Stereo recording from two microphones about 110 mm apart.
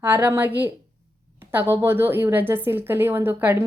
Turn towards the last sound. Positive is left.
turn(degrees=-20)  # may be behind; listen again after turning